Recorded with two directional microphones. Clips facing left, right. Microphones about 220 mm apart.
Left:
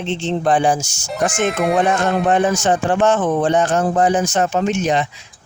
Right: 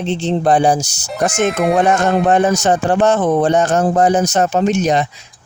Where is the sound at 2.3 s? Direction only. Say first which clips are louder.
Right 2 dB; 40° right (ahead or behind).